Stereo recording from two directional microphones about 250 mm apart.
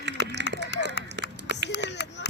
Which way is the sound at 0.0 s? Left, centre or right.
Right.